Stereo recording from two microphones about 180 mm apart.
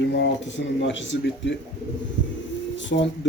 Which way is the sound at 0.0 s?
75° left (ahead or behind).